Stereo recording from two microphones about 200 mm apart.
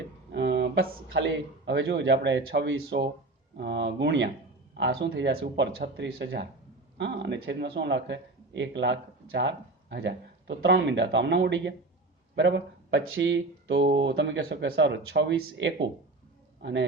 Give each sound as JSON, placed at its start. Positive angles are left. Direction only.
{"t": 0.3, "sound": "a man's voice", "side_deg": -60}